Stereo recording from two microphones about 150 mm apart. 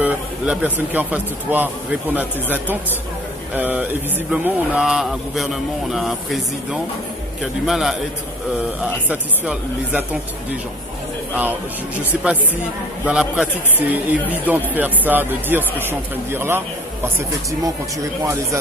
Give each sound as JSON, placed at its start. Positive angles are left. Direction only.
{"t": 0.0, "sound": "a man's voice", "side_deg": -10}
{"t": 9.1, "sound": "a man's voice", "side_deg": -10}
{"t": 13.0, "sound": "a man's voice", "side_deg": -5}
{"t": 18.2, "sound": "speech", "side_deg": -20}